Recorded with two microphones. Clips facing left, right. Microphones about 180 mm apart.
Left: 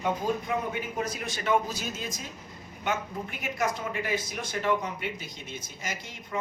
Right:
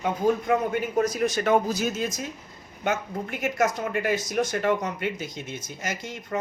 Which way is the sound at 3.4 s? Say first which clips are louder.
Right 6 dB; 45° right (ahead or behind).